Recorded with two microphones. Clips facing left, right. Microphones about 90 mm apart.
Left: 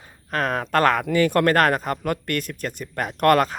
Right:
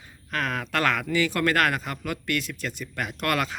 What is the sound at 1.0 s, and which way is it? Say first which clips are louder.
Speech: left 6 dB; 50° left (ahead or behind).